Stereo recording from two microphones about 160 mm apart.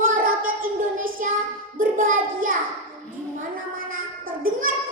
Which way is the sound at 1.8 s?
60° right (ahead or behind).